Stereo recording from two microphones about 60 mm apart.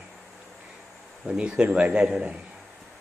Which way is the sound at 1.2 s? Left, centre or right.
Centre.